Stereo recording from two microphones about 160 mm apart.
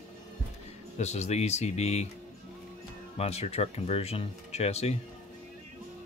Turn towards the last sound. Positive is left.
turn(degrees=40)  # may be behind; listen again after turning